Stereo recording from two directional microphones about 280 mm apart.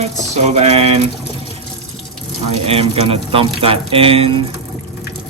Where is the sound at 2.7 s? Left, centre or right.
Right.